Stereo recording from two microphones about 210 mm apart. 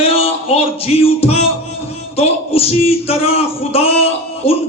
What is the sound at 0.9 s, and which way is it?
Speech, 30° left (ahead or behind).